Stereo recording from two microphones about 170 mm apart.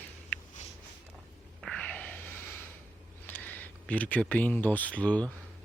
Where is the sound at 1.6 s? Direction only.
5° left (ahead or behind).